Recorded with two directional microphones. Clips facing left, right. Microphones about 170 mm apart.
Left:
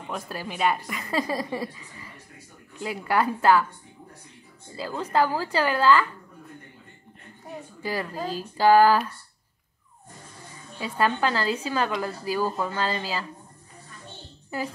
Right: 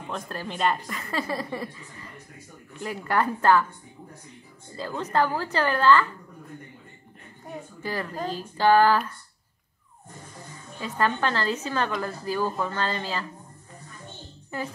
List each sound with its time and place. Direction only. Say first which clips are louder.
0.1 s speech: even; 10° left (ahead or behind)
4.7 s speech: left 1 dB; 10° left (ahead or behind)
7.8 s speech: left 1 dB; 10° left (ahead or behind)
10.8 s speech: left 1 dB; 10° left (ahead or behind)